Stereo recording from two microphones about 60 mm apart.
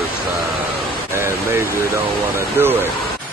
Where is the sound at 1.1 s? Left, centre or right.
Right.